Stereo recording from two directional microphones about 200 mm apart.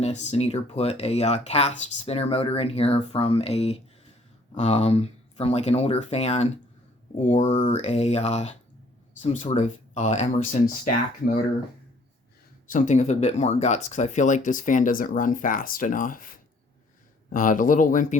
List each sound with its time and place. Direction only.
0.0 s speech: 35° left (ahead or behind)
12.6 s speech: 40° left (ahead or behind)